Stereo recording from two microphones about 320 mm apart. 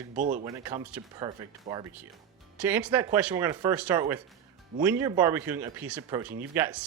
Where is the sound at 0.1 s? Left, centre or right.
Right.